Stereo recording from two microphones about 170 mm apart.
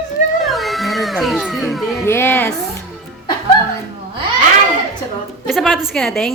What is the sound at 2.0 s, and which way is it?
Speech, 15° left (ahead or behind).